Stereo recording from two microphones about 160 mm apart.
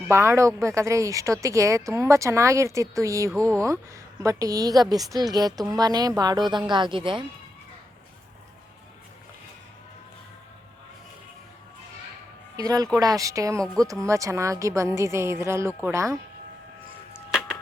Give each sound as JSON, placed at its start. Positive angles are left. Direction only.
{"t": 0.1, "sound": "speech", "side_deg": -15}
{"t": 3.3, "sound": "speech", "side_deg": 5}
{"t": 4.2, "sound": "speech", "side_deg": -20}
{"t": 12.5, "sound": "speech", "side_deg": -20}